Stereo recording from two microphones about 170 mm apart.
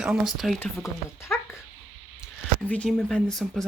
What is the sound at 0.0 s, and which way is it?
Speech, 5° right (ahead or behind).